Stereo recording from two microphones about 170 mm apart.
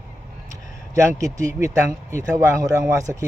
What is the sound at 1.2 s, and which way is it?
Speech, 15° right (ahead or behind).